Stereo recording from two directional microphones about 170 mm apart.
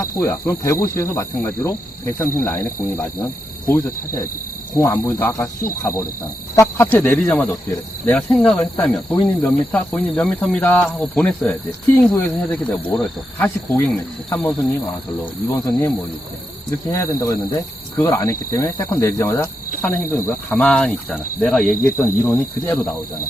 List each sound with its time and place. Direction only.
0.0 s cricket: 15° left (ahead or behind)
3.7 s cricket: 20° left (ahead or behind)
16.9 s cricket: 15° left (ahead or behind)
21.8 s cricket: 15° left (ahead or behind)